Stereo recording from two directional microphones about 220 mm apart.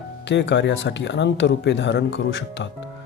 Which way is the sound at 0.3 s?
55° left (ahead or behind).